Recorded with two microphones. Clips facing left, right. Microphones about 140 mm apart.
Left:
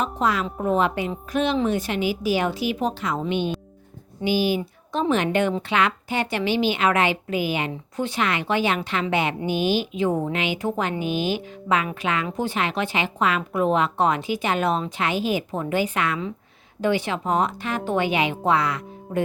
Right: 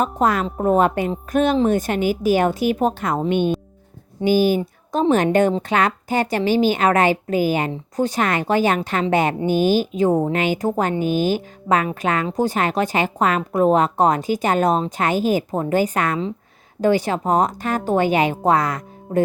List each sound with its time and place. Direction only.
0.0 s a woman's voice: 50° right (ahead or behind)